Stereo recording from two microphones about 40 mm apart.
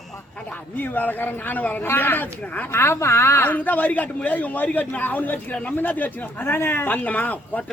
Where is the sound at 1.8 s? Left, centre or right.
Left.